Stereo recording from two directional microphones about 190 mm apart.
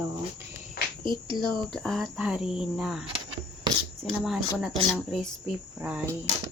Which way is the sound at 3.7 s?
20° right (ahead or behind).